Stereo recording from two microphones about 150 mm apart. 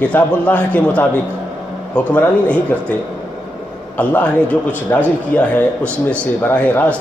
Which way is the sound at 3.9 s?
10° left (ahead or behind).